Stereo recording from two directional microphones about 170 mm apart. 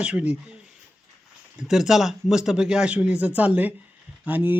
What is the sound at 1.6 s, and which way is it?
Speech, 5° right (ahead or behind).